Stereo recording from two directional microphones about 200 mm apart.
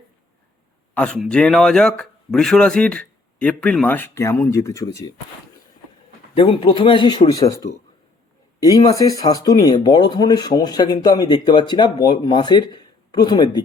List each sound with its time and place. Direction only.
0.9 s speech: 5° left (ahead or behind)
6.3 s speech: 25° left (ahead or behind)